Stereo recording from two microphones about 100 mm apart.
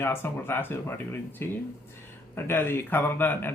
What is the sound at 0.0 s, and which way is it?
Speech, 25° left (ahead or behind).